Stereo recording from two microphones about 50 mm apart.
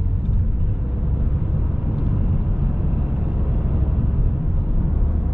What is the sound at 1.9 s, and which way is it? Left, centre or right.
Vehicle, centre.